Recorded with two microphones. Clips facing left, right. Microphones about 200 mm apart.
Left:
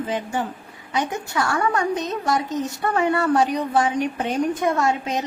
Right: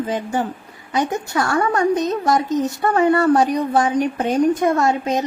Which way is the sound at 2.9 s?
40° right (ahead or behind).